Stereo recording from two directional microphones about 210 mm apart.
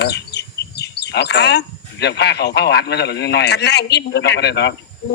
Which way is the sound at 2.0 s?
55° left (ahead or behind).